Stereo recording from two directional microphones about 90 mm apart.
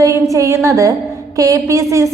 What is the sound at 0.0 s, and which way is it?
A woman's voice, 35° right (ahead or behind).